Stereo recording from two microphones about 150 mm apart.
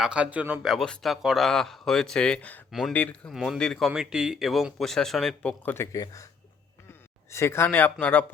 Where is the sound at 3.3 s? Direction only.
Centre (ahead or behind); by 6.2 s 20° left (ahead or behind).